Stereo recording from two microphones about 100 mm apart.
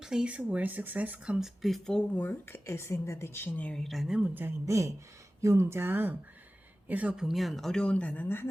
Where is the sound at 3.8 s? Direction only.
Centre (ahead or behind).